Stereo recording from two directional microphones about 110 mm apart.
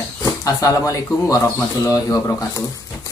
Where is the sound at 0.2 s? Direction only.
30° left (ahead or behind).